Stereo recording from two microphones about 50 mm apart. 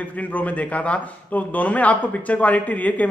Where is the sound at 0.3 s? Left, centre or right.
Left.